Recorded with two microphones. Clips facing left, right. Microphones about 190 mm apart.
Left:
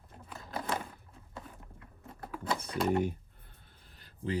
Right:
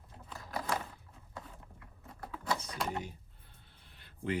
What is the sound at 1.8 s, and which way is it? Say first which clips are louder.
Typing: left 1 dB; 25° left (ahead or behind).